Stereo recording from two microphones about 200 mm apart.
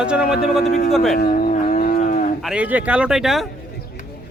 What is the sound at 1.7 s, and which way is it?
Cattle, 45° left (ahead or behind).